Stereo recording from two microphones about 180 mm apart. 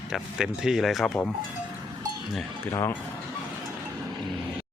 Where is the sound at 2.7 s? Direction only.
15° left (ahead or behind).